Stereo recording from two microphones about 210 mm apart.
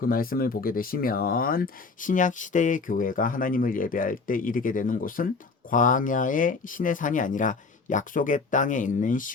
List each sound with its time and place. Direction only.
0.0 s speech: 45° left (ahead or behind)